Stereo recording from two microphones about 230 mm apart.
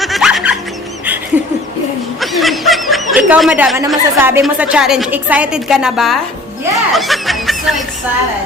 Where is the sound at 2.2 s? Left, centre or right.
Centre.